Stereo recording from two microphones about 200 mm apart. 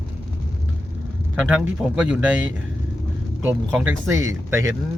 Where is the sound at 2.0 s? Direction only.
5° right (ahead or behind).